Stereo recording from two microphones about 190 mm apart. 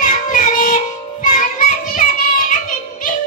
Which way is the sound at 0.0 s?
45° left (ahead or behind).